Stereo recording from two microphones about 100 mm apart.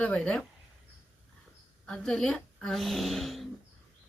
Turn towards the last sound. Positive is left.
turn(degrees=0)  # may be behind; listen again after turning